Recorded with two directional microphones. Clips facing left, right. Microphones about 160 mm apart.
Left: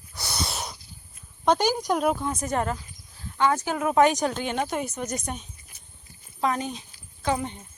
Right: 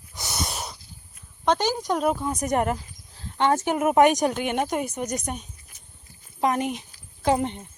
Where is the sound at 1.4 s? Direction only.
10° left (ahead or behind).